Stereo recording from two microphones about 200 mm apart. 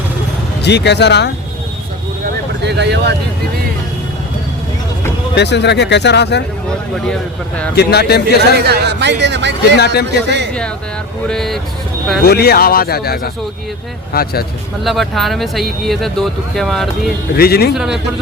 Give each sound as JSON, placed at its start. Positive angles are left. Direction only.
{"t": 0.6, "sound": "speech", "side_deg": 60}
{"t": 2.6, "sound": "speech", "side_deg": -60}
{"t": 5.3, "sound": "speech", "side_deg": 55}
{"t": 7.1, "sound": "speech", "side_deg": 5}
{"t": 7.8, "sound": "a man's voice", "side_deg": 55}
{"t": 8.4, "sound": "speech", "side_deg": -55}
{"t": 9.7, "sound": "speech", "side_deg": 55}
{"t": 11.3, "sound": "speech", "side_deg": 0}
{"t": 12.2, "sound": "a man's voice", "side_deg": 50}
{"t": 14.8, "sound": "speech", "side_deg": 0}
{"t": 17.3, "sound": "a man's voice", "side_deg": 50}
{"t": 17.7, "sound": "speech", "side_deg": 0}